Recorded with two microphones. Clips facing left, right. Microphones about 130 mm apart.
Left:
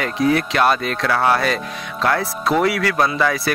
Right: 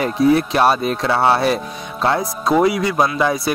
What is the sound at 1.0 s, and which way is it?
Speech, 25° right (ahead or behind).